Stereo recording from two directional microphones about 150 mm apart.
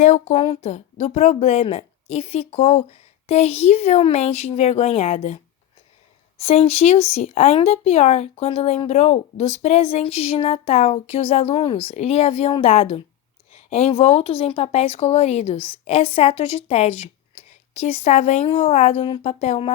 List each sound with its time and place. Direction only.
0.0 s speech: 50° left (ahead or behind)
19.0 s speech: 35° left (ahead or behind)
19.3 s speech: 50° left (ahead or behind)